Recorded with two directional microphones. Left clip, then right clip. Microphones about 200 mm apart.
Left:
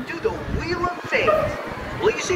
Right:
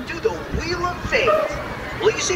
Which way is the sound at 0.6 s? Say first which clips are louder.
Right 1 dB; 55° left (ahead or behind).